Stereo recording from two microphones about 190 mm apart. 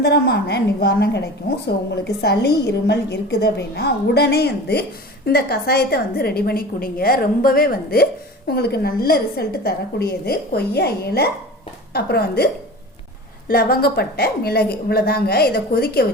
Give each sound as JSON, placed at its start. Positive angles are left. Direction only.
{"t": 0.0, "sound": "a woman's voice", "side_deg": 60}
{"t": 13.5, "sound": "a woman's voice", "side_deg": 55}